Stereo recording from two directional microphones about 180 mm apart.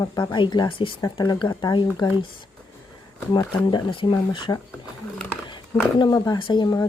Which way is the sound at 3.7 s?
30° left (ahead or behind).